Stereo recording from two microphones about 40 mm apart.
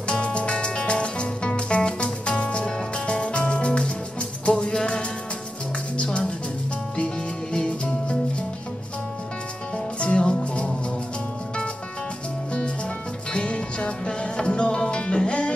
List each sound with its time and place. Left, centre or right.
0.1 s music: left
7.5 s music: left
9.9 s music: left
13.3 s music: left